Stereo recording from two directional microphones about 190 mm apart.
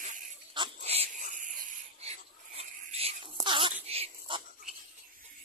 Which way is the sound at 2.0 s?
35° right (ahead or behind).